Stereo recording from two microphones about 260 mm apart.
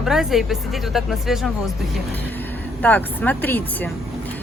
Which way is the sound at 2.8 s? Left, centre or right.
Centre.